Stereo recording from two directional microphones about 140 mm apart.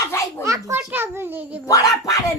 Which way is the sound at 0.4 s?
20° right (ahead or behind).